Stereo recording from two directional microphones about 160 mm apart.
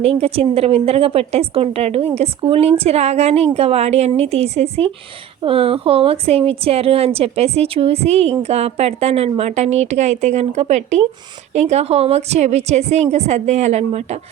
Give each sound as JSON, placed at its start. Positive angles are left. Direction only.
{"t": 0.0, "sound": "a woman's voice", "side_deg": -40}